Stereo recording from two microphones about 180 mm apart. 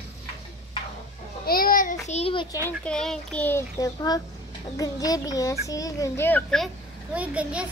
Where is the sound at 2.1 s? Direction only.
35° left (ahead or behind).